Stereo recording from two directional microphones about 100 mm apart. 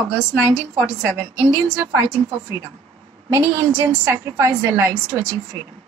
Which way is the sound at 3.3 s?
30° right (ahead or behind).